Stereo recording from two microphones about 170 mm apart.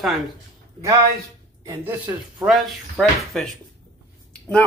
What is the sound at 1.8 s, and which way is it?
Speech, 5° right (ahead or behind).